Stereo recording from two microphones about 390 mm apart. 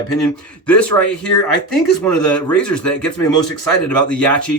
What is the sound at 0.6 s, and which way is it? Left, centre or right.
Speech, centre.